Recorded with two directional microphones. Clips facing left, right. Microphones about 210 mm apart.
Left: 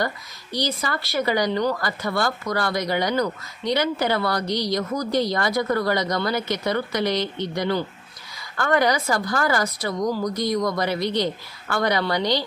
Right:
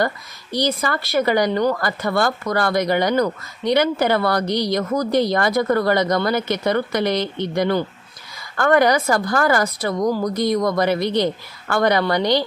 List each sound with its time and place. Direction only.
0.0 s a woman's voice: 55° right (ahead or behind)